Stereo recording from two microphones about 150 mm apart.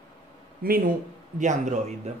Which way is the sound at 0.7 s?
75° right (ahead or behind).